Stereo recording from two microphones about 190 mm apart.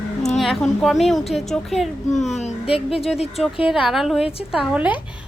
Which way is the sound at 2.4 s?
30° left (ahead or behind).